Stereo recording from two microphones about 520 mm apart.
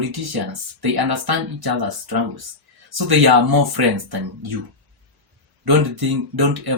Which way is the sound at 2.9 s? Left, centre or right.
Right.